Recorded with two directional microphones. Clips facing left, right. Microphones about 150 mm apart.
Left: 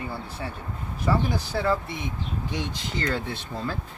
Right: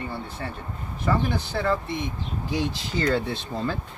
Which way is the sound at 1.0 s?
10° left (ahead or behind).